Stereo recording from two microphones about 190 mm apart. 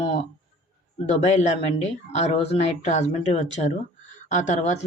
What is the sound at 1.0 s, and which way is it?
Speech, 40° left (ahead or behind).